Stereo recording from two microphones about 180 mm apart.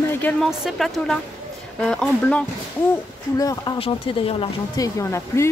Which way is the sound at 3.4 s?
20° left (ahead or behind).